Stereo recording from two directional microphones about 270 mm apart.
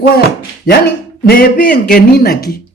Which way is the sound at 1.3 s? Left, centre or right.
Left.